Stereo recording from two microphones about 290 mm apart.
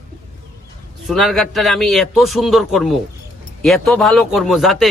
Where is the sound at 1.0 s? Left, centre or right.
Centre.